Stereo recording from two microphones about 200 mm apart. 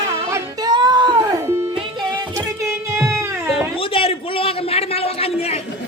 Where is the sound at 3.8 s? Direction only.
25° left (ahead or behind).